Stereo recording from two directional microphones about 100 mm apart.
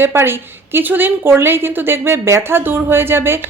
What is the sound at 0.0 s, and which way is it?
A woman's voice, 25° right (ahead or behind).